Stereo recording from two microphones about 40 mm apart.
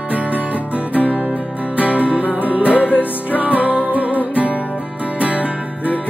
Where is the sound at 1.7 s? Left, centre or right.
Right.